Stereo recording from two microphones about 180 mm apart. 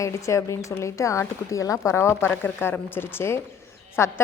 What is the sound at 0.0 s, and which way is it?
A woman's voice, 15° left (ahead or behind).